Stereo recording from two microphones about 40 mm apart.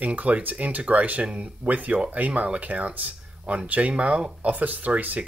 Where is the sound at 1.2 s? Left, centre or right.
Right.